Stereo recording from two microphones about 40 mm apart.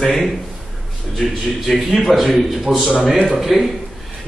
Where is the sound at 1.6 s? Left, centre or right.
Centre.